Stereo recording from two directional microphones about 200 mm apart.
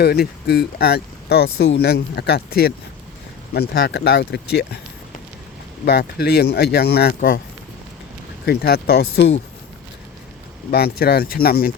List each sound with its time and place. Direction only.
0.0 s speech: 50° left (ahead or behind)
5.8 s speech: 50° left (ahead or behind)
8.4 s speech: 50° left (ahead or behind)
10.7 s speech: 55° left (ahead or behind)